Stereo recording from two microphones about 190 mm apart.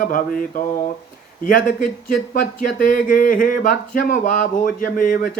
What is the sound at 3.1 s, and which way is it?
Speech, 45° left (ahead or behind).